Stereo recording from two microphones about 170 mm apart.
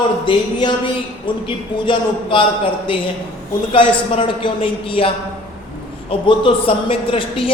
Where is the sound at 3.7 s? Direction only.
30° left (ahead or behind).